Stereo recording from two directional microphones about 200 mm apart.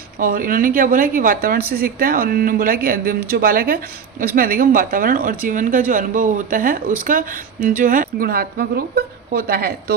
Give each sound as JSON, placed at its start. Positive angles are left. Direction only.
{"t": 0.2, "sound": "speech", "side_deg": -45}